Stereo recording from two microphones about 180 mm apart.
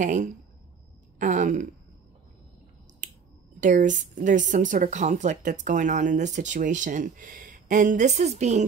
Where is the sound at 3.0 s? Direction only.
45° right (ahead or behind).